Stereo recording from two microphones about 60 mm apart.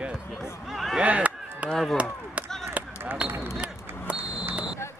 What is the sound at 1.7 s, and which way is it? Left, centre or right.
Speech, centre.